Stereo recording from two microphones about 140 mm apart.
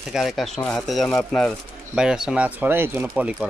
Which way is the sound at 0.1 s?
Centre (ahead or behind).